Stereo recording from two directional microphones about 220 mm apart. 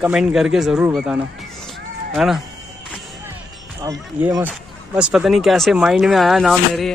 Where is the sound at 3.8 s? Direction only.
10° right (ahead or behind).